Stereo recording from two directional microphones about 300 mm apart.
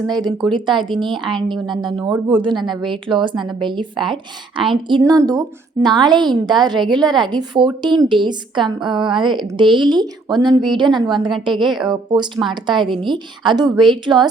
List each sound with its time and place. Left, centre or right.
0.1 s a woman's voice: centre
0.4 s a woman's voice: centre
1.3 s a woman's voice: centre
1.6 s a woman's voice: centre
2.6 s a woman's voice: centre
2.9 s a woman's voice: centre